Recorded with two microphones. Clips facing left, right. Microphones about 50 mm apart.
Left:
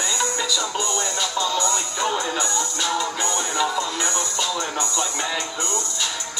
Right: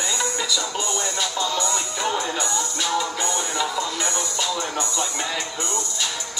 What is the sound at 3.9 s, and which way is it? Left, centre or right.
Music, left.